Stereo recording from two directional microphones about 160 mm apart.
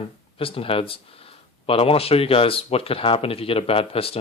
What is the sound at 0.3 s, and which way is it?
Speech, 35° left (ahead or behind).